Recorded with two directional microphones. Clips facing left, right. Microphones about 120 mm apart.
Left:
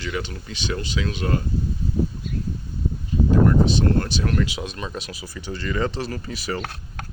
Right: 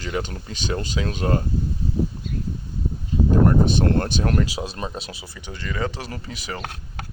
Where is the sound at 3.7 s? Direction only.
50° right (ahead or behind); by 5.1 s 30° right (ahead or behind).